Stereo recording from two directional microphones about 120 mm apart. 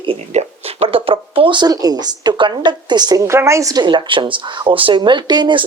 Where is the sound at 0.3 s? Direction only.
55° right (ahead or behind).